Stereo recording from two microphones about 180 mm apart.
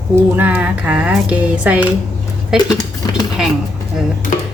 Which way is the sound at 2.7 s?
20° left (ahead or behind).